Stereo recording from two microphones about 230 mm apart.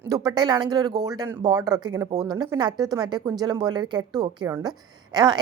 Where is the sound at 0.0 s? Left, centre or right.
Centre.